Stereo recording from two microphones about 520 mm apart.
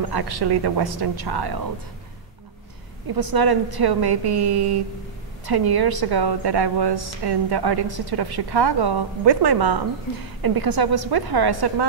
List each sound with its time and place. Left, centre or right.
0.1 s a woman's voice: right
3.2 s a woman's voice: right